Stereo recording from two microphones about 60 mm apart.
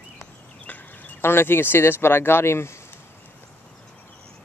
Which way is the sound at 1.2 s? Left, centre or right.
Left.